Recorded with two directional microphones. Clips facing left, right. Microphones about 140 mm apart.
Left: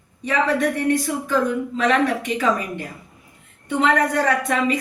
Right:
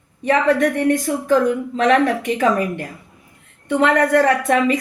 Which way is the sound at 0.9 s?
45° right (ahead or behind).